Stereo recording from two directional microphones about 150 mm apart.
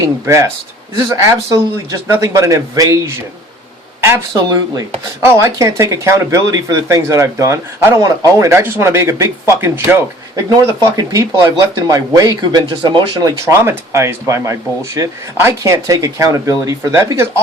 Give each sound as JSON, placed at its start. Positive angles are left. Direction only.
{"t": 0.0, "sound": "speech", "side_deg": -20}
{"t": 4.4, "sound": "speech", "side_deg": -25}